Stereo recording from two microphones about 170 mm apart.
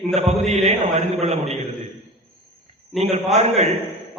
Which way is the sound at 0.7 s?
40° right (ahead or behind).